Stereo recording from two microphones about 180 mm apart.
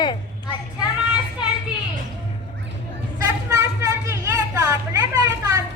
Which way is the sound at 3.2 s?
20° right (ahead or behind).